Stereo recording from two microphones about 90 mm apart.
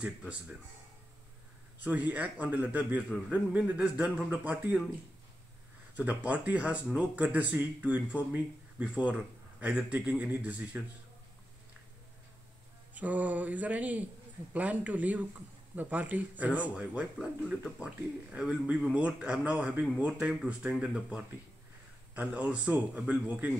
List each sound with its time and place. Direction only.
1.8 s speech: 20° right (ahead or behind)
5.9 s speech: 15° right (ahead or behind)
12.9 s speech: 15° right (ahead or behind)